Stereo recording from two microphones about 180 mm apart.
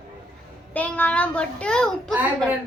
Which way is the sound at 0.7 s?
10° left (ahead or behind).